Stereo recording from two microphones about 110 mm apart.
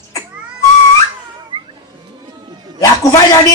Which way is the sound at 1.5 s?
55° right (ahead or behind).